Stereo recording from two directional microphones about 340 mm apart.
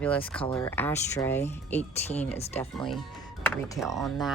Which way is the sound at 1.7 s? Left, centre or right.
Centre.